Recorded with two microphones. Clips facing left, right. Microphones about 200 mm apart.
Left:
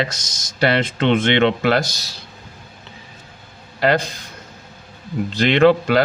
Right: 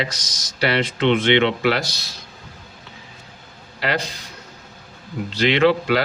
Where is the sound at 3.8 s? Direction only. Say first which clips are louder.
Left 6 dB; 50° left (ahead or behind).